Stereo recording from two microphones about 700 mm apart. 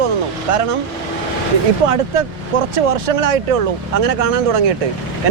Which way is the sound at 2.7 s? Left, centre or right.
Right.